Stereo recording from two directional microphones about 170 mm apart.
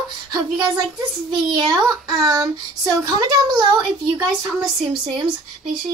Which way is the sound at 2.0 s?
20° right (ahead or behind).